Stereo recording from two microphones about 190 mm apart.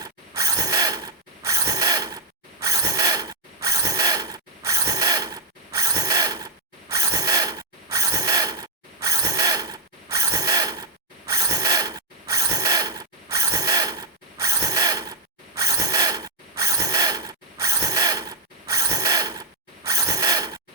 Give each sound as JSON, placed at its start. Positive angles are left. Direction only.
{"t": 0.0, "sound": "mechanisms", "side_deg": -20}